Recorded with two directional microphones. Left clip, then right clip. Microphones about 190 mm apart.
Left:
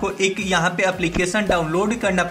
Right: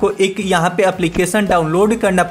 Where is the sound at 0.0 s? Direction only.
60° right (ahead or behind).